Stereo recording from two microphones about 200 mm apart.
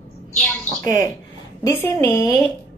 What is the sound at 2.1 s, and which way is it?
Speech, 15° left (ahead or behind).